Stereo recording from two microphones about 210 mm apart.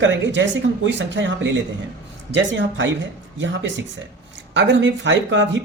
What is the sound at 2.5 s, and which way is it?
Speech, 60° right (ahead or behind).